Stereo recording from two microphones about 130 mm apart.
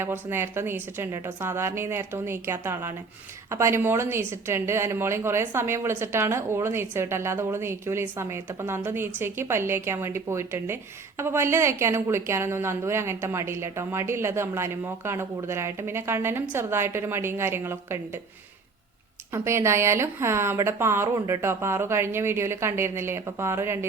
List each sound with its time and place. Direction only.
0.0 s a woman's voice: 20° right (ahead or behind)
19.3 s a woman's voice: 20° right (ahead or behind)
21.2 s speech: 30° right (ahead or behind)
21.4 s a woman's voice: 20° right (ahead or behind)